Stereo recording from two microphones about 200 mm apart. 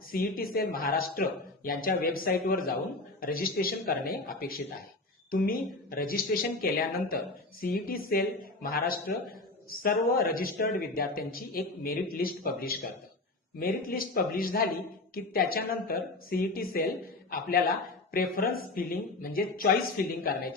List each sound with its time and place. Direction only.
0.1 s a man's voice: 45° left (ahead or behind)
18.1 s a man's voice: 50° left (ahead or behind)